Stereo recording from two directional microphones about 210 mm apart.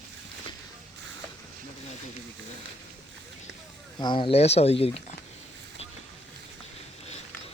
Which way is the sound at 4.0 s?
20° left (ahead or behind).